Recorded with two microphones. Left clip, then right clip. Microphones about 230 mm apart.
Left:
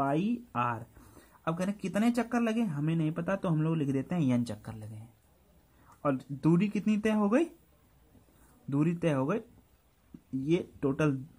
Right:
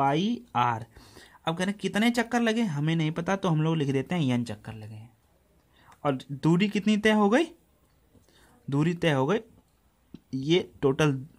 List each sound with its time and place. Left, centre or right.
0.0 s speech: right
6.0 s speech: right
8.6 s speech: right
10.4 s speech: right